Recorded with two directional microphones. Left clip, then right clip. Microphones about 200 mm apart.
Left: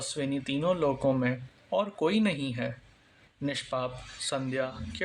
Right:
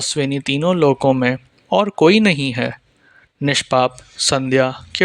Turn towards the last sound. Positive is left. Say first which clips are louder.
# right 16 dB
turn(degrees=-45)  # may be behind; listen again after turning